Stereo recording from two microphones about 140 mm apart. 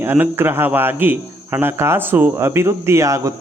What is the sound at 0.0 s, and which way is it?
Speech, 15° right (ahead or behind).